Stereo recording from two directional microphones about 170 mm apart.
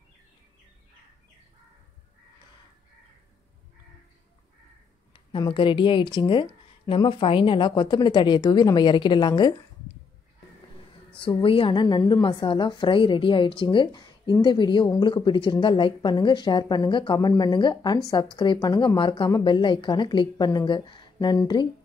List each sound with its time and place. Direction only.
5.1 s a woman's voice: 30° left (ahead or behind)
11.1 s a woman's voice: 30° left (ahead or behind)